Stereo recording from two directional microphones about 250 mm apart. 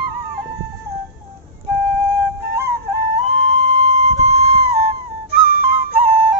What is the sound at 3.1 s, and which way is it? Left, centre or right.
Music, right.